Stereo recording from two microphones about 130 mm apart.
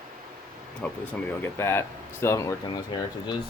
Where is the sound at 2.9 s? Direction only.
35° left (ahead or behind).